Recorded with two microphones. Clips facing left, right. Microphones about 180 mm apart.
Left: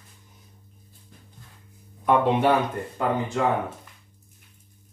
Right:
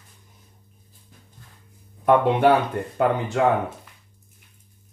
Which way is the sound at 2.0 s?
60° right (ahead or behind).